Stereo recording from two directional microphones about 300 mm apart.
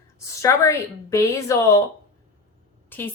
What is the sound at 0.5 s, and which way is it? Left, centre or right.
A woman's voice, centre.